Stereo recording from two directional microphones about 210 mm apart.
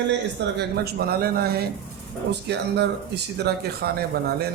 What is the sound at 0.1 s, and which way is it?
Speech, 50° right (ahead or behind).